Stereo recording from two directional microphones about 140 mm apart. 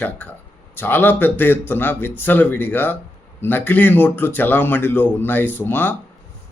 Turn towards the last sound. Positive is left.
turn(degrees=15)  # may be behind; listen again after turning